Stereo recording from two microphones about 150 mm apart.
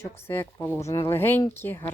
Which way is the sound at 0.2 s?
15° left (ahead or behind).